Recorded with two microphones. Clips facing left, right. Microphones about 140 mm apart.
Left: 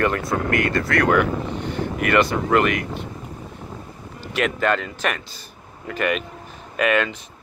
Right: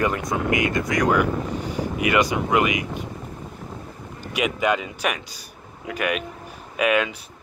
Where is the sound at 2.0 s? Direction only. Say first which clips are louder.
Left 2 dB; 10° right (ahead or behind).